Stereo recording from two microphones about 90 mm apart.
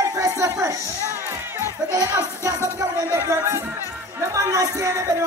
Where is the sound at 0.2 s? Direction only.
35° right (ahead or behind).